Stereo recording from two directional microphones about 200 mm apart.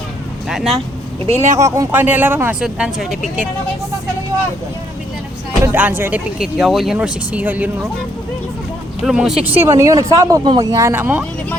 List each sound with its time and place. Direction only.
0.4 s speech: centre (ahead or behind)
1.5 s speech: 15° right (ahead or behind)
5.6 s speech: 10° right (ahead or behind)
9.0 s speech: centre (ahead or behind)